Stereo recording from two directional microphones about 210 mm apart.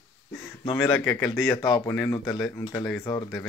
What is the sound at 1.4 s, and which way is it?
Speech, 20° left (ahead or behind).